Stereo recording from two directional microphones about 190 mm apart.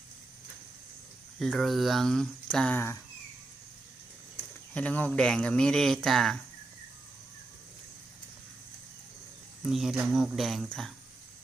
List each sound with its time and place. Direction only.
1.4 s speech: centre (ahead or behind)
4.7 s speech: 5° left (ahead or behind)
9.6 s speech: centre (ahead or behind)